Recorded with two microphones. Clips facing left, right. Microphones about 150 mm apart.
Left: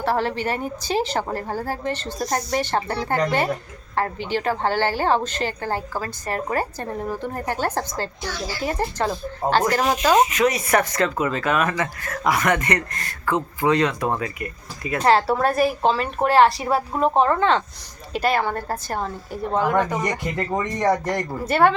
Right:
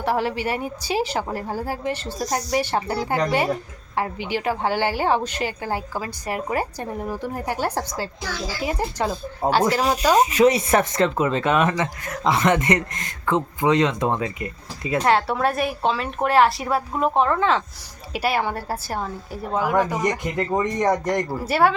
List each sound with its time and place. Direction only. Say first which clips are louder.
0.0 s a woman's voice: even; 10° right (ahead or behind)
10.2 s speech: right 4 dB; 30° right (ahead or behind)
15.0 s a woman's voice: left 3 dB; centre (ahead or behind); by 21.1 s 15° right (ahead or behind)
21.2 s a woman's voice: left 1 dB; 5° right (ahead or behind)